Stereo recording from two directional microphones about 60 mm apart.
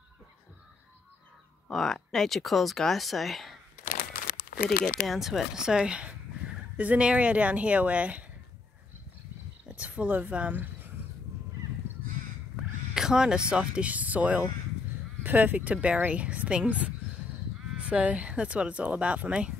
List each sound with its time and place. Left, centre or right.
1.7 s speech: centre
4.6 s speech: centre; by 8.2 s right
9.7 s speech: right
12.9 s speech: centre